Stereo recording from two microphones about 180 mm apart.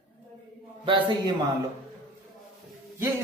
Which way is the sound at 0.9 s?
25° right (ahead or behind).